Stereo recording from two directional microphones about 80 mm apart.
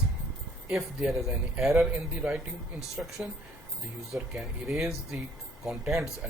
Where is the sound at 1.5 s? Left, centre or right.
Centre.